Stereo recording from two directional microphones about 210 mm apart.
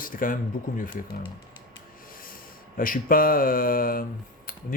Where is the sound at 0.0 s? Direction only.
40° left (ahead or behind).